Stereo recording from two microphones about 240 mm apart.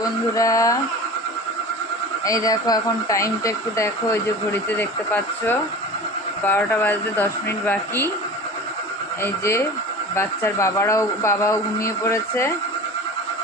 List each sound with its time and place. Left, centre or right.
0.3 s speech: centre
2.2 s speech: centre
9.2 s speech: centre